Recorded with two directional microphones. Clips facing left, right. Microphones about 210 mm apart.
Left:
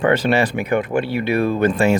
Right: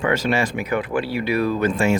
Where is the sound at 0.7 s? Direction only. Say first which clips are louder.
Left 3 dB; 25° left (ahead or behind).